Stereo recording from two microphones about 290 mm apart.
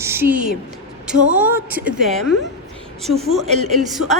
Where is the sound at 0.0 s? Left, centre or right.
Centre.